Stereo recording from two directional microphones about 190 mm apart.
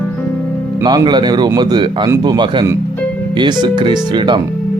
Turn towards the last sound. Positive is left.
turn(degrees=-25)  # may be behind; listen again after turning